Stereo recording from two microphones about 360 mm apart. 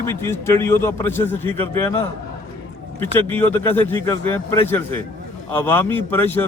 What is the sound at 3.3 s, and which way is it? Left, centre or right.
A man's voice, centre.